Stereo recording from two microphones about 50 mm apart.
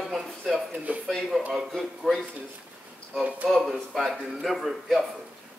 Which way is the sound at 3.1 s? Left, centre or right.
Right.